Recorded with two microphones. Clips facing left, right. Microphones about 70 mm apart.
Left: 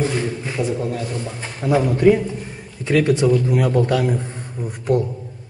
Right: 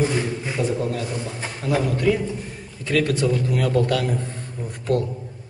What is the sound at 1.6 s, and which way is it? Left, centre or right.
A man's voice, centre.